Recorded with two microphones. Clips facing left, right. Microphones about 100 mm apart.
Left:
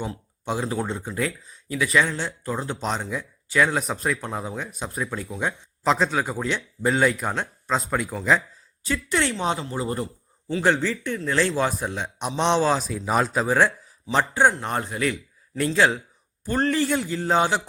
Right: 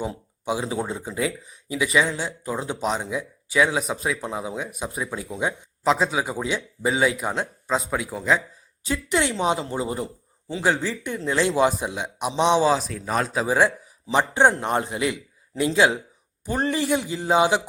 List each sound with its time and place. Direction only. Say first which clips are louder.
0.4 s speech: even; 10° right (ahead or behind)
8.9 s speech: right 1 dB; 15° right (ahead or behind)
9.6 s a man's voice: right 2 dB; 30° right (ahead or behind)
9.8 s speech: even; 10° right (ahead or behind)
14.3 s a man's voice: right 3 dB; 25° right (ahead or behind); by 17.6 s 10° right (ahead or behind)